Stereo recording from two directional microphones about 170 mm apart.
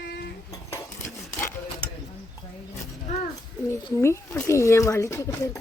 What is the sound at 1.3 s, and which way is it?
Sewing machine, 15° left (ahead or behind).